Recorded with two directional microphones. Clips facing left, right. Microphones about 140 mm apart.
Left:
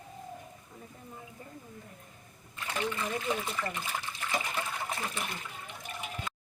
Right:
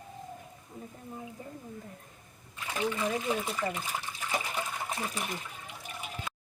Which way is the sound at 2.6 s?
10° right (ahead or behind).